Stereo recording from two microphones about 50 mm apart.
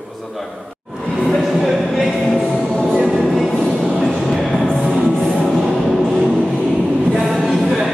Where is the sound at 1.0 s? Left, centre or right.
Centre.